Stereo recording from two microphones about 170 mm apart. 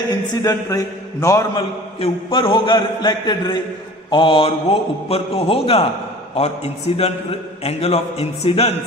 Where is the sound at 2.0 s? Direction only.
30° left (ahead or behind).